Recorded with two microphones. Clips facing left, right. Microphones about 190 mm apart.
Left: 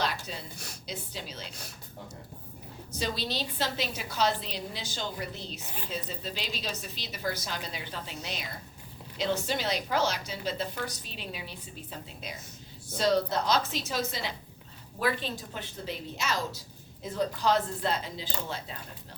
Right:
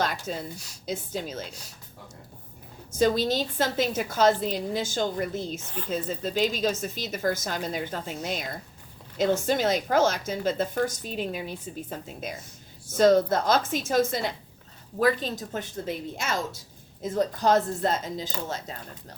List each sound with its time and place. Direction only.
0.0 s a woman's voice: 50° right (ahead or behind)
3.0 s a woman's voice: 50° right (ahead or behind)